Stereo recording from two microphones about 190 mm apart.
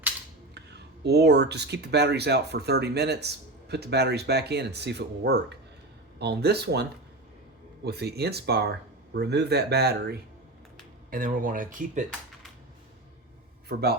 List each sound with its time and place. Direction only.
0.5 s speech: 60° right (ahead or behind)
7.9 s speech: 60° right (ahead or behind)
11.1 s speech: 45° right (ahead or behind)